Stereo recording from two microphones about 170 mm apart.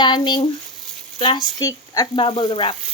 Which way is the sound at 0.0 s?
25° left (ahead or behind).